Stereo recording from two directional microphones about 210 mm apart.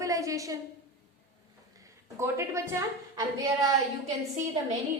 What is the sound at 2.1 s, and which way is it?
A woman's voice, 15° right (ahead or behind).